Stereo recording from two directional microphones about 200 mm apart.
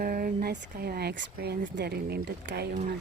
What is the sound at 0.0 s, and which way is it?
A woman's voice, 45° right (ahead or behind).